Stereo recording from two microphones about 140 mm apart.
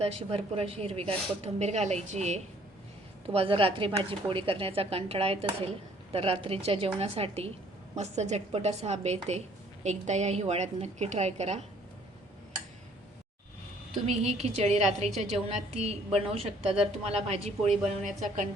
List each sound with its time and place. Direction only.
0.0 s speech: 45° right (ahead or behind)
3.3 s a woman's voice: 40° right (ahead or behind)
14.1 s speech: 50° right (ahead or behind)